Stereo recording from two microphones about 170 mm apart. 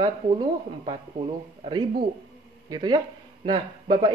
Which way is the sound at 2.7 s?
25° right (ahead or behind).